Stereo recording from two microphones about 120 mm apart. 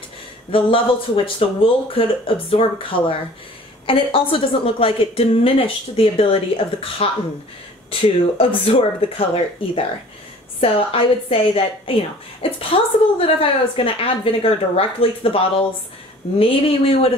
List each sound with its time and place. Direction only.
0.5 s a woman's voice: 50° left (ahead or behind)
3.8 s a woman's voice: 50° left (ahead or behind)